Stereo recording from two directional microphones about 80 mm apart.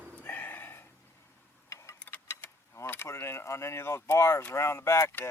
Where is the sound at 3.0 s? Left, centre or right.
Left.